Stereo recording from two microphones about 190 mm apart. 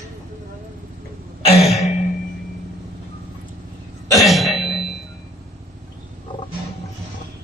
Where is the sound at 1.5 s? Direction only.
35° left (ahead or behind).